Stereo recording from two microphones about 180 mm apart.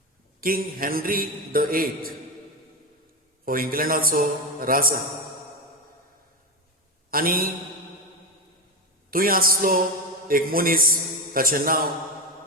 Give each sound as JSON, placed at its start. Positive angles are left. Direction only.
{"t": 0.4, "sound": "a man's voice", "side_deg": -55}
{"t": 3.4, "sound": "a man's voice", "side_deg": -50}
{"t": 7.1, "sound": "a man's voice", "side_deg": -55}
{"t": 9.0, "sound": "a man's voice", "side_deg": -55}